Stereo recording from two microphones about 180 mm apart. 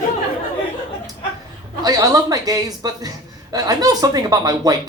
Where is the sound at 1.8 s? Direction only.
20° right (ahead or behind).